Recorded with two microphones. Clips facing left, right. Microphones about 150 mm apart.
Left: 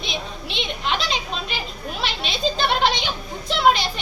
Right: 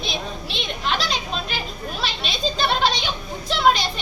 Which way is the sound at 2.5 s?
15° left (ahead or behind).